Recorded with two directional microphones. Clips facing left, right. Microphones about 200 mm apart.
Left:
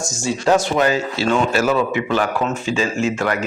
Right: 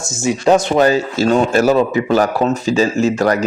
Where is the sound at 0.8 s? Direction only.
35° right (ahead or behind).